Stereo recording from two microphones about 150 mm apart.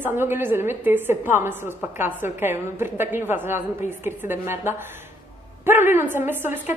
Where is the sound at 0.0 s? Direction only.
15° right (ahead or behind).